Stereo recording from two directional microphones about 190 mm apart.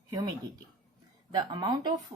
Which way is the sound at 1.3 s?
20° right (ahead or behind).